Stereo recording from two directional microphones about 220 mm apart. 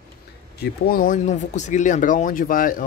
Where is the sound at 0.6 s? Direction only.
40° left (ahead or behind).